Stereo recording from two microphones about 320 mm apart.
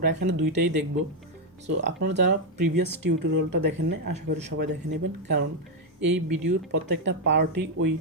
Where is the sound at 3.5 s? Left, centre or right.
Right.